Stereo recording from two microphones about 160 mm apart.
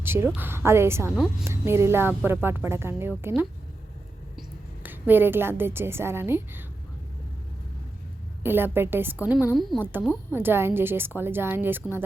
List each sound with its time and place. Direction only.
0.0 s speech: 15° right (ahead or behind)
1.1 s a woman's voice: centre (ahead or behind)
1.5 s a woman's voice: 15° right (ahead or behind)
8.4 s speech: 15° right (ahead or behind)
9.6 s a woman's voice: centre (ahead or behind)
10.3 s speech: 15° right (ahead or behind)